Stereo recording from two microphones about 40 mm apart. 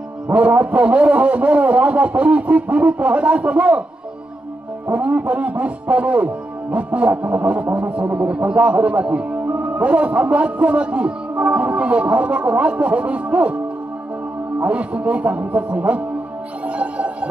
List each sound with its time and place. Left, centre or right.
0.3 s a man's voice: right
4.8 s a man's voice: right
14.6 s a man's voice: right
16.6 s music: right